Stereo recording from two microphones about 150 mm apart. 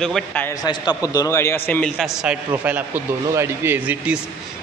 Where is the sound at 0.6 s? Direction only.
25° left (ahead or behind).